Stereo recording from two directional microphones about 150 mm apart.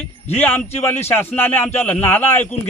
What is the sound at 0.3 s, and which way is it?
A man's voice, 10° left (ahead or behind).